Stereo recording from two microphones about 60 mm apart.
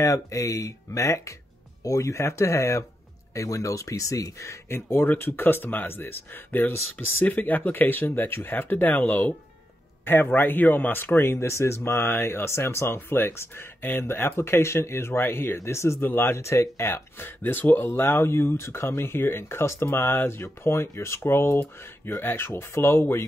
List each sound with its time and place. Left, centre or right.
0.0 s speech: left
4.6 s speech: left
10.3 s speech: left
11.3 s speech: left
16.0 s speech: left